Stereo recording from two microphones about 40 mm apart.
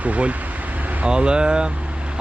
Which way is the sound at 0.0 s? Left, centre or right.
Right.